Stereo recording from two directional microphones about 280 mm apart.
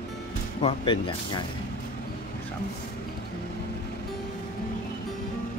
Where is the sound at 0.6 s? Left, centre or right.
Centre.